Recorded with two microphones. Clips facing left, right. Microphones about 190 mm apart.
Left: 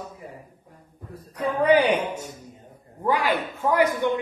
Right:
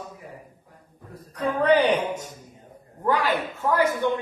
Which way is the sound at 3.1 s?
10° left (ahead or behind).